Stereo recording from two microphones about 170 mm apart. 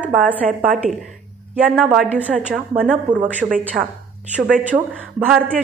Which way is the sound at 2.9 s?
10° right (ahead or behind).